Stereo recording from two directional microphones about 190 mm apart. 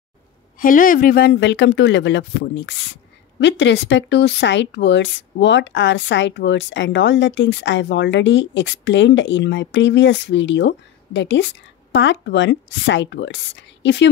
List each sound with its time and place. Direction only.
0.6 s speech: 45° left (ahead or behind); by 14.1 s 70° left (ahead or behind)